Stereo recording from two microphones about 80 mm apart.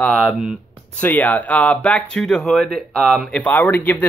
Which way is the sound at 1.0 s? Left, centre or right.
Centre.